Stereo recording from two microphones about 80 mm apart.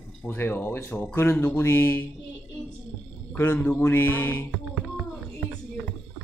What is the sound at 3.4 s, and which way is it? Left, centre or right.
Speech, left.